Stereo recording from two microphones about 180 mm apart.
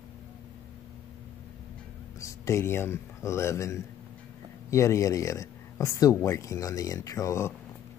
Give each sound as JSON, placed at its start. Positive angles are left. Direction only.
{"t": 2.1, "sound": "speech", "side_deg": 15}